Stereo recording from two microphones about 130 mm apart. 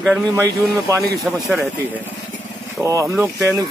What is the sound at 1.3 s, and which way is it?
Speech, 5° right (ahead or behind).